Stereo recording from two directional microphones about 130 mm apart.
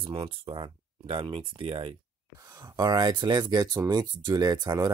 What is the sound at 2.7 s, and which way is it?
Speech, 30° right (ahead or behind).